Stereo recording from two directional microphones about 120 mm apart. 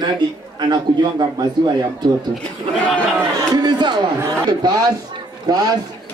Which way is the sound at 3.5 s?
35° right (ahead or behind).